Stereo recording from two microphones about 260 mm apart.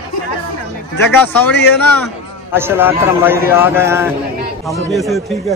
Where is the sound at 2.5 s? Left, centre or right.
Centre.